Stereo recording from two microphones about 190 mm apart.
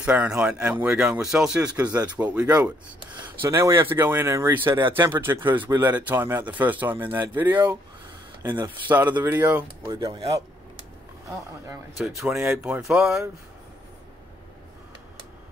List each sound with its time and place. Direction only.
0.0 s speech: 5° right (ahead or behind)
9.9 s speech: 20° right (ahead or behind)
12.3 s speech: 10° right (ahead or behind)